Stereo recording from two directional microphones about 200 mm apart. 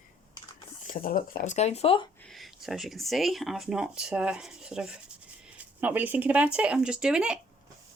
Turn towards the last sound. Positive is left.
turn(degrees=-5)  # may be behind; listen again after turning